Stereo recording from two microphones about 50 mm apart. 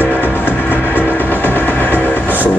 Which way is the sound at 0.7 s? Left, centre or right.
Left.